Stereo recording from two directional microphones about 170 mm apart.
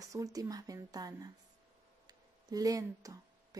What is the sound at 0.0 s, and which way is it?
A woman's voice, 20° right (ahead or behind).